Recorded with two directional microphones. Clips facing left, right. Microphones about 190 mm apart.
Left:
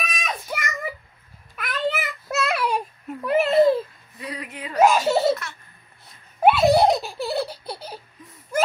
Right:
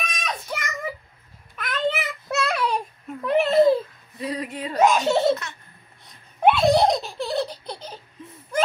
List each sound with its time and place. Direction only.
0.0 s child singing: 5° left (ahead or behind)
4.2 s a sound: 30° right (ahead or behind)
4.7 s giggle: 5° left (ahead or behind)
5.3 s laughter: 20° right (ahead or behind)
6.0 s laughter: 5° left (ahead or behind)